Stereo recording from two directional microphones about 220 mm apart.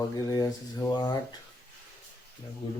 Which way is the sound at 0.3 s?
15° left (ahead or behind).